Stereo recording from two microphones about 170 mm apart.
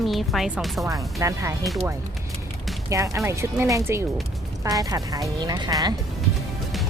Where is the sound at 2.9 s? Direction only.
20° right (ahead or behind).